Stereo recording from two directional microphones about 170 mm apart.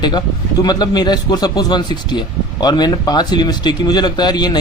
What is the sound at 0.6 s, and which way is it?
Speech, 25° left (ahead or behind).